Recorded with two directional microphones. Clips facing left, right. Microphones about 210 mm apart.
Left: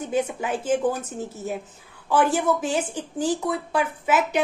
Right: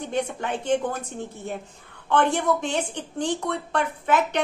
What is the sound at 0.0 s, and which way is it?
A woman's voice, 5° left (ahead or behind).